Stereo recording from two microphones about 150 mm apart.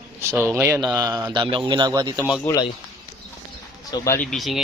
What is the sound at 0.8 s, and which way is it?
A man's voice, 25° right (ahead or behind).